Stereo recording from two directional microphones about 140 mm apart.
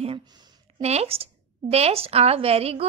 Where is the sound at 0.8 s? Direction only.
50° right (ahead or behind).